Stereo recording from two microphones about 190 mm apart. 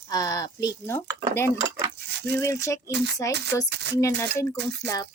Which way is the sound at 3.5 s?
15° left (ahead or behind).